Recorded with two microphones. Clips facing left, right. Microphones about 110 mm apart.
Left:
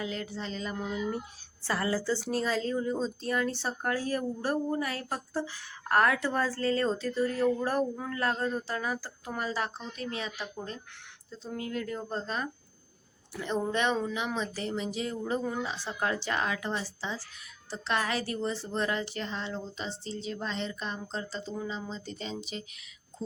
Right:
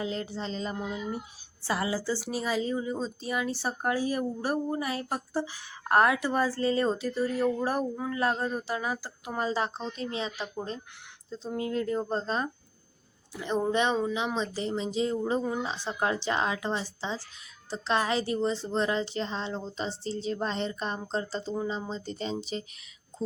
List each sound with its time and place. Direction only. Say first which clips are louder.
0.0 s a woman's voice: right 3 dB; 30° right (ahead or behind)
0.8 s a woman's voice: left 1 dB; 15° right (ahead or behind); by 12.5 s 30° right (ahead or behind)
13.3 s a woman's voice: right 3 dB; 15° right (ahead or behind); by 22.6 s 35° right (ahead or behind)